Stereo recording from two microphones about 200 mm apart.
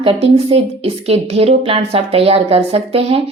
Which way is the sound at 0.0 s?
30° right (ahead or behind).